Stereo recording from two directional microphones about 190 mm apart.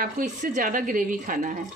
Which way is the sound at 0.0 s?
45° right (ahead or behind).